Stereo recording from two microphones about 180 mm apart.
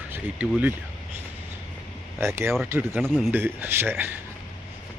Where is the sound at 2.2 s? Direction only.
15° right (ahead or behind).